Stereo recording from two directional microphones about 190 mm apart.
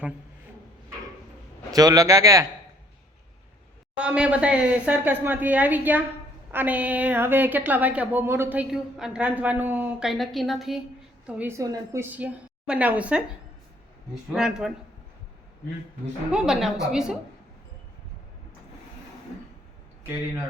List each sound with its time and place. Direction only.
1.7 s a woman's voice: 20° right (ahead or behind)
3.9 s a woman's voice: 5° right (ahead or behind)
14.3 s a woman's voice: 5° right (ahead or behind)
16.3 s a woman's voice: centre (ahead or behind)